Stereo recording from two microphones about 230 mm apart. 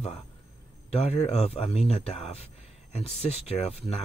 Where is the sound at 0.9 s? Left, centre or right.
Left.